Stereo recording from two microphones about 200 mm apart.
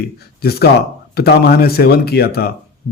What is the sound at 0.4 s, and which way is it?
A man's voice, 50° left (ahead or behind).